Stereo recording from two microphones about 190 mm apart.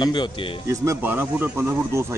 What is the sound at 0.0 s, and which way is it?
Speech, 25° left (ahead or behind).